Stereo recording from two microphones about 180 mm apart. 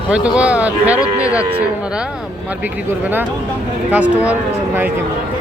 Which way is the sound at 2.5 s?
10° right (ahead or behind).